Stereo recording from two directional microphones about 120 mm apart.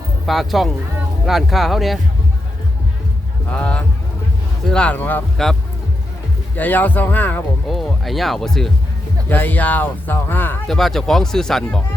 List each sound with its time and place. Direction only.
0.3 s speech: centre (ahead or behind)
3.5 s speech: 10° left (ahead or behind)
6.6 s speech: 15° left (ahead or behind)
7.7 s speech: centre (ahead or behind)
9.3 s speech: 15° left (ahead or behind)
10.7 s speech: centre (ahead or behind)